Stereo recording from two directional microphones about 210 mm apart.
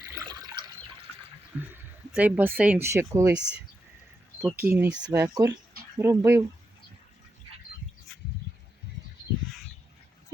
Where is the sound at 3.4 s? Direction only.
25° left (ahead or behind).